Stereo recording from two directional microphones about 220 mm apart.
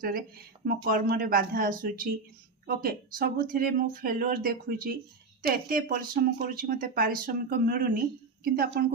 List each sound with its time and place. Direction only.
0.0 s a woman's voice: 40° right (ahead or behind)